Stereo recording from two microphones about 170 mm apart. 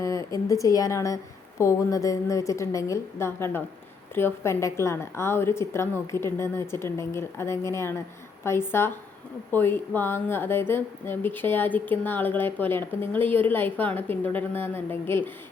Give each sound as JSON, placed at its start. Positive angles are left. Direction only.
{"t": 0.0, "sound": "a woman's voice", "side_deg": 20}